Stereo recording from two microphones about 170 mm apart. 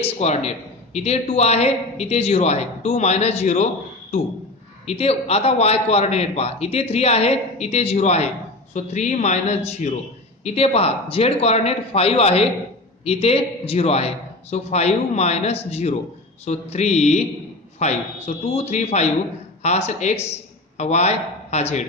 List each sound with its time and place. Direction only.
0.0 s a man's voice: 40° left (ahead or behind)
4.8 s a man's voice: 40° left (ahead or behind)